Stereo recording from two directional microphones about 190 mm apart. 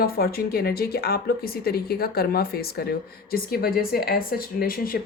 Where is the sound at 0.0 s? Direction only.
55° left (ahead or behind).